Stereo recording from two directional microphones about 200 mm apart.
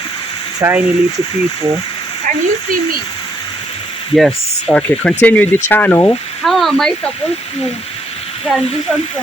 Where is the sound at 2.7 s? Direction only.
45° right (ahead or behind).